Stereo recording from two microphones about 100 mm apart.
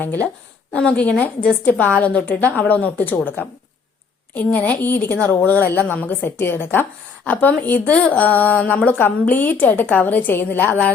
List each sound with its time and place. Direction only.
0.0 s a woman's voice: 20° left (ahead or behind)
4.4 s a woman's voice: 15° left (ahead or behind)